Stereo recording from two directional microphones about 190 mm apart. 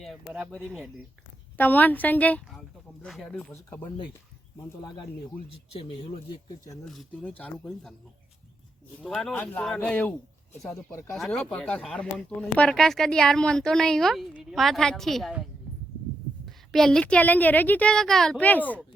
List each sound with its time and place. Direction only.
0.0 s a woman's voice: centre (ahead or behind)
5.7 s speech: 30° left (ahead or behind)
6.8 s speech: centre (ahead or behind)
9.0 s a woman's voice: centre (ahead or behind)
16.5 s a woman's voice: centre (ahead or behind)